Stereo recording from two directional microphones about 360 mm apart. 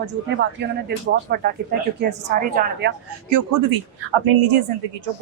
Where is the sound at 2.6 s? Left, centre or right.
Right.